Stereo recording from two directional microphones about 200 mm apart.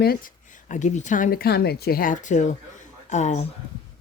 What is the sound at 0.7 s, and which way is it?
Speech, 35° left (ahead or behind).